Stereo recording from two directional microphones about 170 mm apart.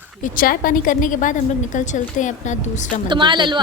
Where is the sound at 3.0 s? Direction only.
25° right (ahead or behind).